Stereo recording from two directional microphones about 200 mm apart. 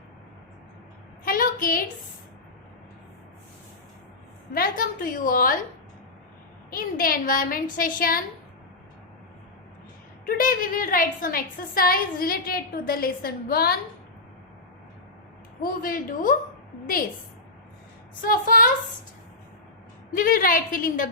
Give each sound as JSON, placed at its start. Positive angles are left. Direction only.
{"t": 1.2, "sound": "a sound", "side_deg": 45}
{"t": 4.5, "sound": "a woman's voice", "side_deg": 45}
{"t": 6.7, "sound": "a woman's voice", "side_deg": 45}
{"t": 10.2, "sound": "a woman's voice", "side_deg": 45}
{"t": 15.6, "sound": "a woman's voice", "side_deg": 45}
{"t": 18.2, "sound": "a woman's voice", "side_deg": 45}
{"t": 20.1, "sound": "a woman's voice", "side_deg": 45}